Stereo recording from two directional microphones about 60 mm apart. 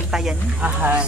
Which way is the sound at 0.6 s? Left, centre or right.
Right.